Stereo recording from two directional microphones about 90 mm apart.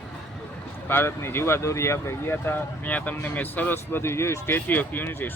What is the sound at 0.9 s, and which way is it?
Speech, 25° left (ahead or behind).